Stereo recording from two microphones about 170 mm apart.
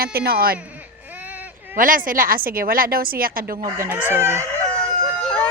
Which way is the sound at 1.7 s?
55° right (ahead or behind).